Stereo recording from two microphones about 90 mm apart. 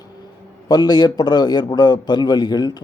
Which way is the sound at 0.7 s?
50° left (ahead or behind).